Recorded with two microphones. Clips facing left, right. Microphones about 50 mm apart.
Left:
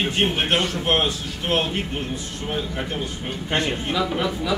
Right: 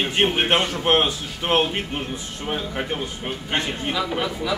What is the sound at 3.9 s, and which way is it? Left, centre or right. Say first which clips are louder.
Speech: right 1 dB; centre.